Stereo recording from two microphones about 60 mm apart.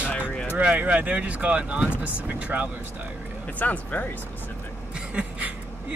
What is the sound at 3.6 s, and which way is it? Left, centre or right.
Speech, left.